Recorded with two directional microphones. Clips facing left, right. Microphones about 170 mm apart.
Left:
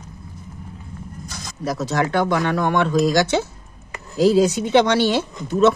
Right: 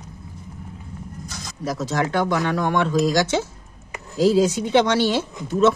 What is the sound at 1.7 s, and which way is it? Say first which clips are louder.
Speech: left 2 dB; 65° left (ahead or behind).